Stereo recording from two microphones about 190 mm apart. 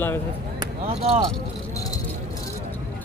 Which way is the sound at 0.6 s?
30° right (ahead or behind).